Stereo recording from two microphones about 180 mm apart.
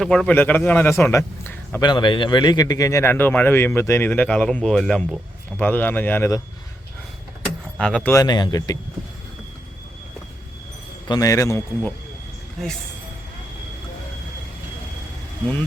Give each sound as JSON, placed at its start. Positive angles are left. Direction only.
{"t": 0.0, "sound": "a man's voice", "side_deg": 5}
{"t": 1.8, "sound": "a man's voice", "side_deg": 25}
{"t": 7.8, "sound": "speech", "side_deg": 5}
{"t": 8.1, "sound": "speech", "side_deg": 20}
{"t": 11.1, "sound": "a man's voice", "side_deg": 20}
{"t": 12.6, "sound": "speech", "side_deg": 0}